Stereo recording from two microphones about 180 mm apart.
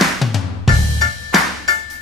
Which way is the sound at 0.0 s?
Centre (ahead or behind).